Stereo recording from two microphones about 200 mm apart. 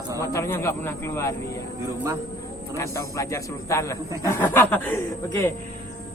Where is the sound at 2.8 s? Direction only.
15° left (ahead or behind).